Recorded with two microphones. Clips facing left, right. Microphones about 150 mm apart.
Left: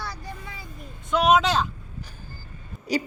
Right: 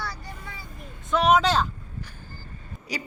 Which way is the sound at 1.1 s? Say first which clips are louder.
Even; 15° left (ahead or behind).